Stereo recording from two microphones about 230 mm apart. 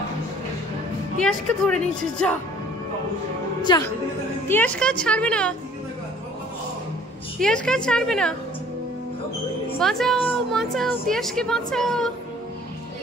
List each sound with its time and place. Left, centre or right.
1.2 s a woman's voice: centre
3.6 s a woman's voice: centre
7.3 s a woman's voice: centre
9.8 s a woman's voice: centre